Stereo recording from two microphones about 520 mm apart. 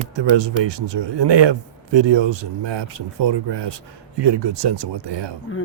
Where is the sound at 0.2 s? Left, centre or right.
Right.